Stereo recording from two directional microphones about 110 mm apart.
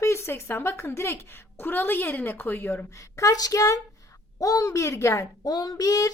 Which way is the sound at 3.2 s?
35° left (ahead or behind).